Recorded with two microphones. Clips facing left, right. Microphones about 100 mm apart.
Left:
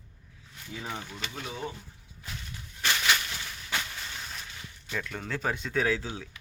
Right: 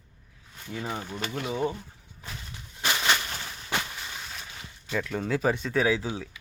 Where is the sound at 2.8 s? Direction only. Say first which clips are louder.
Right 2 dB; 25° right (ahead or behind).